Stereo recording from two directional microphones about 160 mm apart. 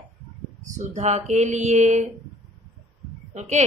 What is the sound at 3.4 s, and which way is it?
Speech, 45° right (ahead or behind).